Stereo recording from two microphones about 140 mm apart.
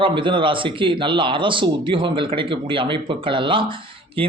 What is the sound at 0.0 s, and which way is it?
A man's voice, 35° right (ahead or behind).